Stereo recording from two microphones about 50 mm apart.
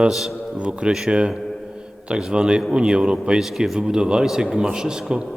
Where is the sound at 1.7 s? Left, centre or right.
Centre.